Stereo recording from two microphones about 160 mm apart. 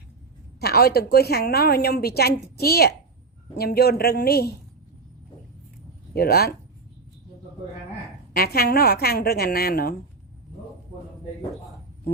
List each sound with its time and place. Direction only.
0.6 s a woman's voice: 75° left (ahead or behind)
6.1 s a woman's voice: 75° left (ahead or behind)
8.4 s a woman's voice: 70° left (ahead or behind)